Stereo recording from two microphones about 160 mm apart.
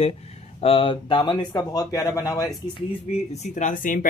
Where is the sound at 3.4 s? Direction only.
50° left (ahead or behind).